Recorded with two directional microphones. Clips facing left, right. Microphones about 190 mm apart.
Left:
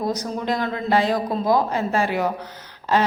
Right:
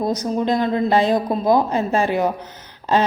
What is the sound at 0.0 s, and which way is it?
Speech, 20° right (ahead or behind).